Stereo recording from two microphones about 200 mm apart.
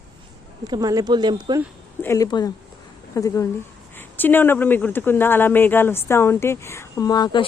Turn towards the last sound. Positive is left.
turn(degrees=20)  # may be behind; listen again after turning